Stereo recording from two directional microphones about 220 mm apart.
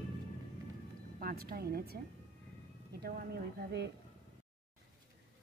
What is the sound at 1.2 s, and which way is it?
Speech, 40° right (ahead or behind).